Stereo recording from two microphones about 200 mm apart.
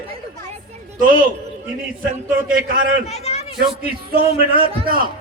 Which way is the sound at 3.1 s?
30° left (ahead or behind).